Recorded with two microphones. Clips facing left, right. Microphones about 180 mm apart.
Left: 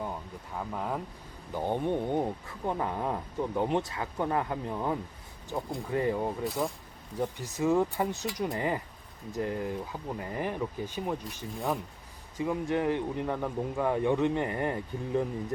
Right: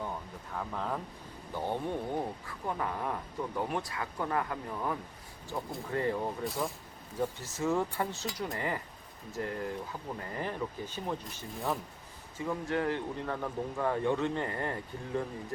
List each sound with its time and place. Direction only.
0.5 s speech: 10° left (ahead or behind)
5.5 s speech: 10° left (ahead or behind)